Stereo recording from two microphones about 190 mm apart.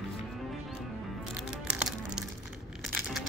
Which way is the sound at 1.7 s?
5° right (ahead or behind).